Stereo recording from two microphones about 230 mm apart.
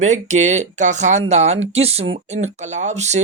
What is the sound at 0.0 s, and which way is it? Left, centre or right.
Speech, right.